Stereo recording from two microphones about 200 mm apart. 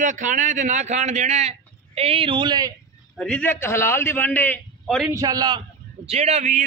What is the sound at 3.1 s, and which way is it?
A man's voice, 5° left (ahead or behind).